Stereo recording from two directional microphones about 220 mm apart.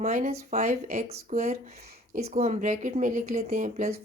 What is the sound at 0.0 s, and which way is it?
Speech, 30° right (ahead or behind).